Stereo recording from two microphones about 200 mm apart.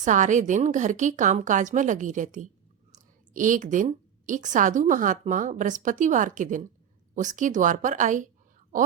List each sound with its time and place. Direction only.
0.0 s a woman's voice: 40° right (ahead or behind)